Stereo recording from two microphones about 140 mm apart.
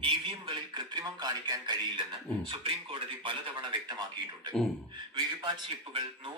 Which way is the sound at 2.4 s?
40° right (ahead or behind).